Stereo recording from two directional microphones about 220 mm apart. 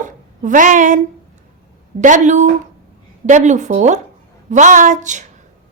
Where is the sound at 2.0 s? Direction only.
35° right (ahead or behind).